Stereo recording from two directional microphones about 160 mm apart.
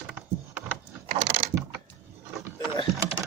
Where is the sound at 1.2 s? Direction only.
50° right (ahead or behind).